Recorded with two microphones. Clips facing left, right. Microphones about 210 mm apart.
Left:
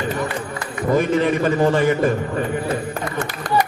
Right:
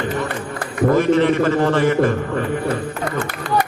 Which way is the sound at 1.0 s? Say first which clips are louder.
Right 2 dB; 15° left (ahead or behind).